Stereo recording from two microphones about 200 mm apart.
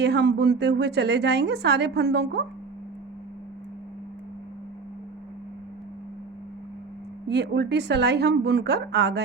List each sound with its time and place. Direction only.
0.0 s a woman's voice: 60° right (ahead or behind)
7.3 s a woman's voice: 55° right (ahead or behind)